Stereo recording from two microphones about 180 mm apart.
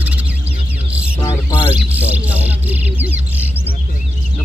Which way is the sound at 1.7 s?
10° right (ahead or behind).